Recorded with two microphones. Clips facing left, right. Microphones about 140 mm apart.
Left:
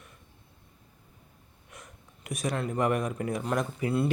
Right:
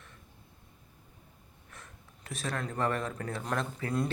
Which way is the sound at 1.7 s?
15° left (ahead or behind).